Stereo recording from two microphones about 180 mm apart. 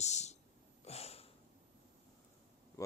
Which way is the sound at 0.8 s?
35° left (ahead or behind).